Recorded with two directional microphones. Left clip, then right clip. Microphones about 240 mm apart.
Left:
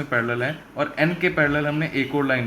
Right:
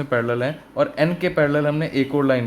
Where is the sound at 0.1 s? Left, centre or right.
Right.